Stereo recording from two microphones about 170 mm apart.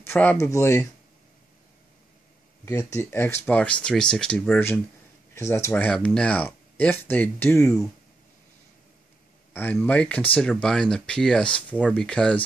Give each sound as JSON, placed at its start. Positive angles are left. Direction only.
{"t": 0.0, "sound": "speech", "side_deg": 10}
{"t": 2.6, "sound": "speech", "side_deg": 20}
{"t": 9.5, "sound": "speech", "side_deg": 10}